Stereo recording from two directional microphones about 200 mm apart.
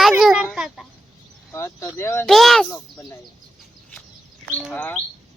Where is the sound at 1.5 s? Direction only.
15° left (ahead or behind).